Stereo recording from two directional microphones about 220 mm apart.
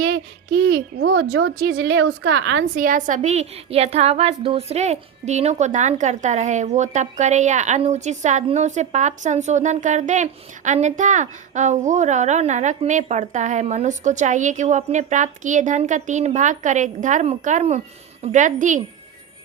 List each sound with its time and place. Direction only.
0.1 s a child's voice: 50° right (ahead or behind)
1.3 s a woman's voice: 65° right (ahead or behind)
1.6 s a woman's voice: 50° right (ahead or behind)
2.7 s a woman's voice: 40° right (ahead or behind)